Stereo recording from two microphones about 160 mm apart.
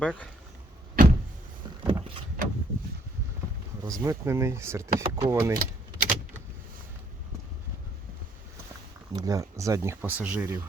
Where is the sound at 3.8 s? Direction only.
25° right (ahead or behind).